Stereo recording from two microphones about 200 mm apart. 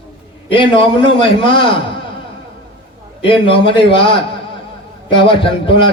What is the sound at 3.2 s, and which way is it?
A man's voice, 25° left (ahead or behind).